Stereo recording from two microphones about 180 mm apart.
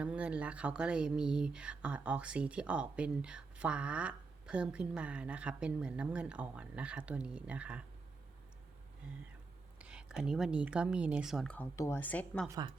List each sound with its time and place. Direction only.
0.0 s speech: 5° right (ahead or behind)
9.7 s a woman's voice: 5° right (ahead or behind)
11.5 s speech: 15° left (ahead or behind)
12.5 s speech: 20° right (ahead or behind)